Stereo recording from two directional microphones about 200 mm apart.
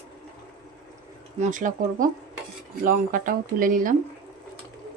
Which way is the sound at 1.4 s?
40° right (ahead or behind).